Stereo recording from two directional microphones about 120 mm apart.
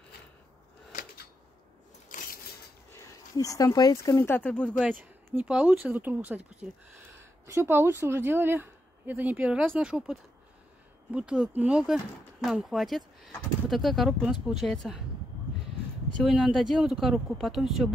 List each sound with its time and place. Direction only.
2.9 s speech: 25° left (ahead or behind); by 4.7 s 10° left (ahead or behind)
4.7 s a woman's voice: 10° right (ahead or behind)
16.2 s speech: centre (ahead or behind)